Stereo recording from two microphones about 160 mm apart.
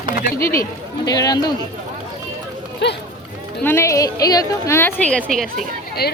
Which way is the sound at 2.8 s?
90° left.